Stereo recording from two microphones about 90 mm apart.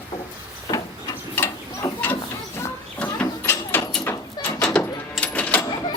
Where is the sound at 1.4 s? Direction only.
20° left (ahead or behind).